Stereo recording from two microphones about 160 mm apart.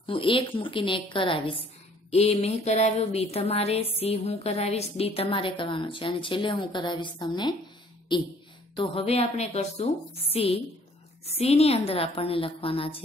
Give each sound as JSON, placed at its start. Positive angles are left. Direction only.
{"t": 0.0, "sound": "speech", "side_deg": 35}
{"t": 8.7, "sound": "speech", "side_deg": 40}